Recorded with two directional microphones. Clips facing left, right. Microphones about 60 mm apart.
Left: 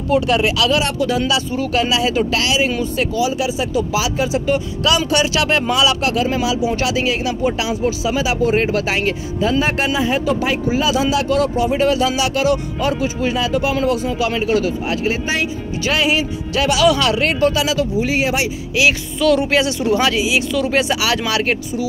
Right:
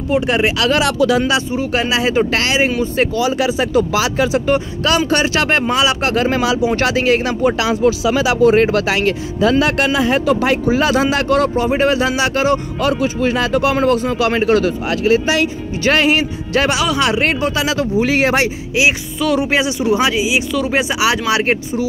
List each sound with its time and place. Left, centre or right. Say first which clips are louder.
0.1 s speech: even; right
0.7 s speech: right 4 dB; right
1.2 s speech: right 2 dB; right
3.2 s speech: right 1 dB; right
6.1 s speech: right 3 dB; right
7.4 s speech: right 5 dB; right
12.8 s speech: right 3 dB; right
13.7 s speech: right 3 dB; right
15.8 s speech: right 4 dB; right
17.0 s speech: even; right
17.9 s speech: right 4 dB; right
19.1 s speech: left 1 dB; centre
20.7 s speech: right 3 dB; centre